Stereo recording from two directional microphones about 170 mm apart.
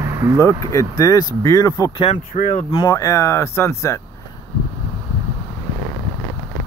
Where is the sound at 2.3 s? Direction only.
55° left (ahead or behind).